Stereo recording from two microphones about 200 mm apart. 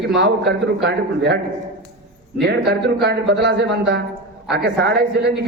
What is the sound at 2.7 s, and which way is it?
A man's voice, 55° right (ahead or behind).